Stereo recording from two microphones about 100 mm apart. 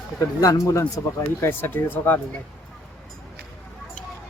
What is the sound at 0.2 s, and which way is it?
Speech, 35° left (ahead or behind).